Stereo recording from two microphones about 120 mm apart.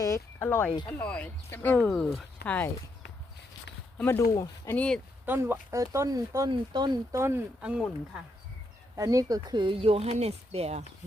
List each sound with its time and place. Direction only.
0.0 s speech: 20° left (ahead or behind)
1.8 s speech: centre (ahead or behind)
2.4 s speech: 15° left (ahead or behind)
3.9 s speech: 15° left (ahead or behind)
4.2 s speech: 30° left (ahead or behind)
4.7 s speech: 10° left (ahead or behind)
5.2 s speech: 20° right (ahead or behind); by 7.2 s 35° right (ahead or behind)
7.2 s speech: 20° right (ahead or behind)
7.6 s speech: 5° right (ahead or behind)
9.0 s speech: 30° right (ahead or behind); by 10.8 s 60° right (ahead or behind)